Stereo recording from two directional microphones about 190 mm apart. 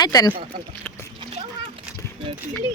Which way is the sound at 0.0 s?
20° left (ahead or behind).